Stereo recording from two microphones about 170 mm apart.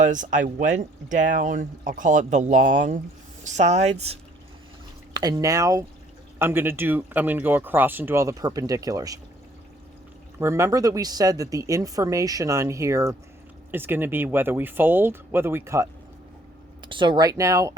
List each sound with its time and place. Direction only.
0.0 s speech: 50° right (ahead or behind)
5.1 s speech: 20° right (ahead or behind)
10.4 s speech: 15° right (ahead or behind)
16.8 s speech: 30° right (ahead or behind)